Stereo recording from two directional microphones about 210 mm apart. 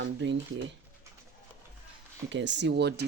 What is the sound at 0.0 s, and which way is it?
Speech, 55° right (ahead or behind).